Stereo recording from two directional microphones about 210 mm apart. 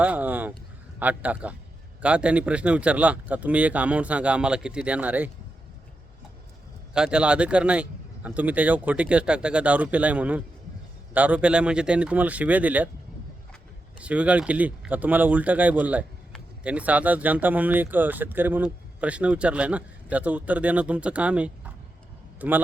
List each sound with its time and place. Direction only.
0.0 s a sound: 5° right (ahead or behind)
0.9 s speech: 5° right (ahead or behind)
6.9 s speech: 5° right (ahead or behind)
14.0 s a man's voice: 5° right (ahead or behind)